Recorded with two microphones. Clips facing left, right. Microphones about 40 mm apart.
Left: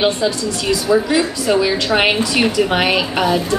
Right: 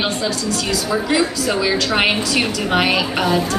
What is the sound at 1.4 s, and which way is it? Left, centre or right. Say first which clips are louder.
A woman's voice: left 3 dB; centre.